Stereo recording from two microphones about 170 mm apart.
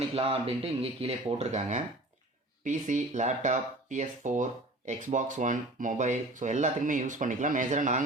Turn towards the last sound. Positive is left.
turn(degrees=-45)  # may be behind; listen again after turning